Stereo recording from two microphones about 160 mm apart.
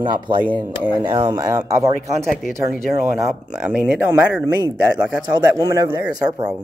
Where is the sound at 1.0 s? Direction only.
25° right (ahead or behind).